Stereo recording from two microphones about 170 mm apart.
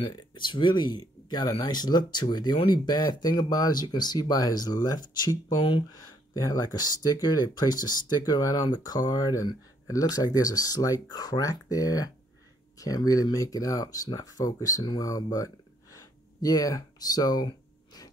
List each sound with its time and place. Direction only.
0.0 s speech: 25° left (ahead or behind)